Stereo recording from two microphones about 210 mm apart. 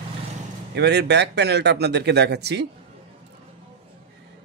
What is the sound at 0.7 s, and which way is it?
A man's voice, 55° right (ahead or behind).